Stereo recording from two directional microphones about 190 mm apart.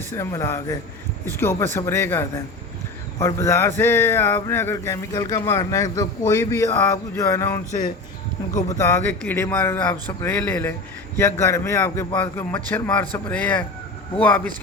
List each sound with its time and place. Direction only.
0.1 s speech: 15° left (ahead or behind)
8.8 s speech: 15° left (ahead or behind)